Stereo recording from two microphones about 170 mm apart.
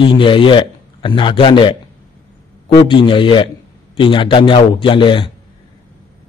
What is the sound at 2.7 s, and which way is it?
A man's voice, 30° left (ahead or behind).